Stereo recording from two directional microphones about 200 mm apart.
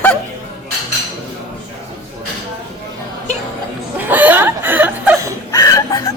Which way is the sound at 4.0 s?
10° right (ahead or behind).